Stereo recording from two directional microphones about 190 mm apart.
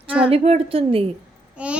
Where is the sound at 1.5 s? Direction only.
5° right (ahead or behind).